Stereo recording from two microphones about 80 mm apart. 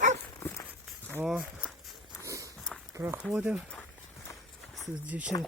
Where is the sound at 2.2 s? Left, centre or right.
Right.